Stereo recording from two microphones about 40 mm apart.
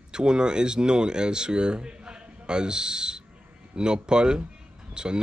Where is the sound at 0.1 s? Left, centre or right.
Right.